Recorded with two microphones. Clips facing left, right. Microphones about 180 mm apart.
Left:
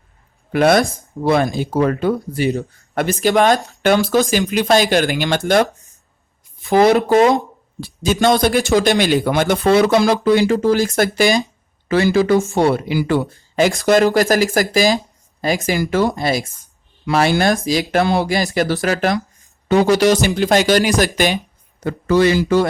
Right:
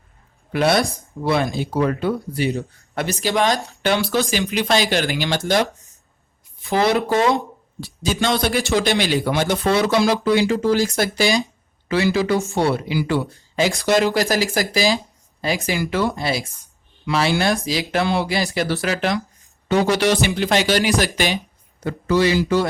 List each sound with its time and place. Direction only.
0.5 s speech: 50° left (ahead or behind)
7.8 s speech: 50° left (ahead or behind)